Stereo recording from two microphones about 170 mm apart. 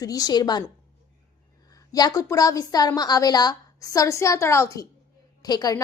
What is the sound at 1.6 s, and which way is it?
A woman's voice, 20° left (ahead or behind).